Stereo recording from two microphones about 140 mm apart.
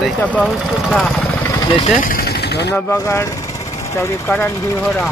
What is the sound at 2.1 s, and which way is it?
Speech, 90° left.